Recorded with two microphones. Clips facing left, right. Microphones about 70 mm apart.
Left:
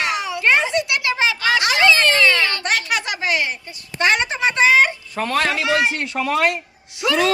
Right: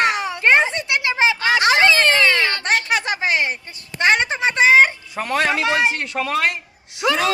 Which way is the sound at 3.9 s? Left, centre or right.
Right.